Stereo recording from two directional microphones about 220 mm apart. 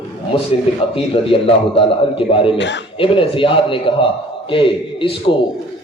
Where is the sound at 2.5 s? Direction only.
55° left (ahead or behind).